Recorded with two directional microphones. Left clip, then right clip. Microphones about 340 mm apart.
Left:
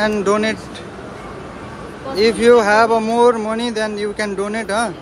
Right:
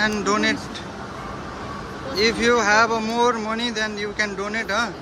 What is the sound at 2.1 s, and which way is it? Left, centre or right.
Speech, centre.